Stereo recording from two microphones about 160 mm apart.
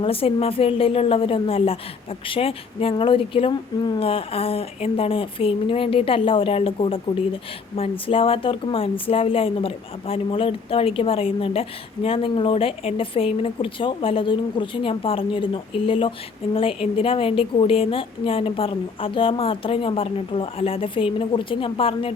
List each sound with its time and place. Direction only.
0.0 s a woman's voice: 35° left (ahead or behind)